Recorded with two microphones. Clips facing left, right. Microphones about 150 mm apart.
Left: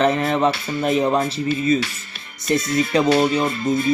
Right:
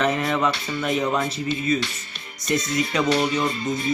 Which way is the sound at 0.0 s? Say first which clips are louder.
Left 4 dB; 30° left (ahead or behind).